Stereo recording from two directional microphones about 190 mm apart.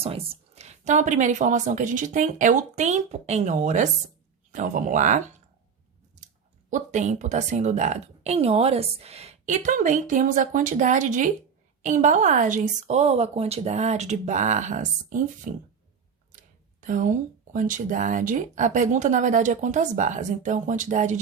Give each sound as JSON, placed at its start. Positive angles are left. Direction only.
{"t": 0.0, "sound": "a woman's voice", "side_deg": -30}
{"t": 6.7, "sound": "a woman's voice", "side_deg": -40}
{"t": 16.8, "sound": "a woman's voice", "side_deg": -45}